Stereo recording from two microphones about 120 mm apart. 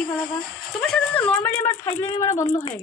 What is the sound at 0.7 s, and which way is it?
A man's voice, 5° left (ahead or behind).